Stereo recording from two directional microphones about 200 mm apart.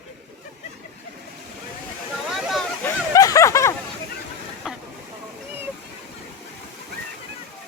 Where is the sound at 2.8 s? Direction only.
15° left (ahead or behind).